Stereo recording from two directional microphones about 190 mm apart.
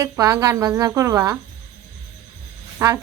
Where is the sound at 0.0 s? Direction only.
15° right (ahead or behind).